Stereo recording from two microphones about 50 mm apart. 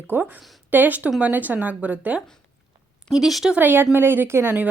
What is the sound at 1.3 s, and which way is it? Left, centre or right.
Speech, right.